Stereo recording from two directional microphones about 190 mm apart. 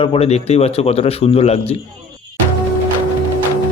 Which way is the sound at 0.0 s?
30° left (ahead or behind).